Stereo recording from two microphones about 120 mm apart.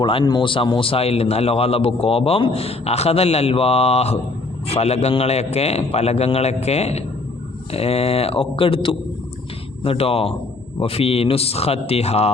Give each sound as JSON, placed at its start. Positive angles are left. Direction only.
{"t": 0.0, "sound": "a man's voice", "side_deg": 45}